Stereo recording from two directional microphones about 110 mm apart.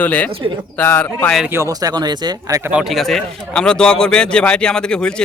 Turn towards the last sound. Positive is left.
turn(degrees=5)  # may be behind; listen again after turning